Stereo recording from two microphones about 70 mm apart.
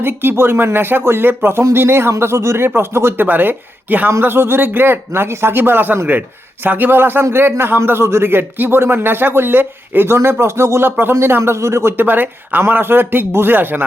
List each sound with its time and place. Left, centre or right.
0.0 s speech: right
11.9 s speech: right